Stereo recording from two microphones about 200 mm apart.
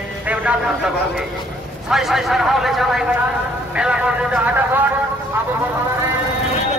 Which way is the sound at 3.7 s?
5° right (ahead or behind).